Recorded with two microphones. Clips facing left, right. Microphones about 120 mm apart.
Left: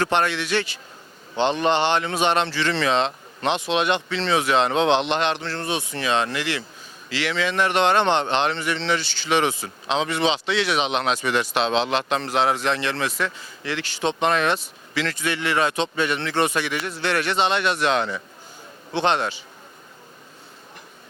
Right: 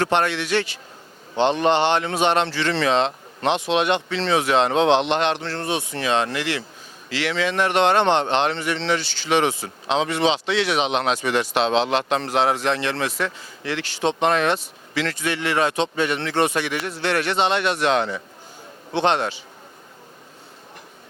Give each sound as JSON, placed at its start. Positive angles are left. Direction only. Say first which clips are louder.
{"t": 0.0, "sound": "speech", "louder": "right 1 dB", "side_deg": -60}
{"t": 5.4, "sound": "speech", "louder": "right 1 dB", "side_deg": -45}